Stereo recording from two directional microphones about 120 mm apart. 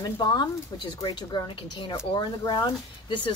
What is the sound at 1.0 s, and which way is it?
A woman's voice, 40° left (ahead or behind).